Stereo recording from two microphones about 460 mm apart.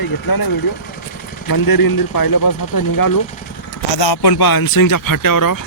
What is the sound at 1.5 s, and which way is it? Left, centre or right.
Speech, left.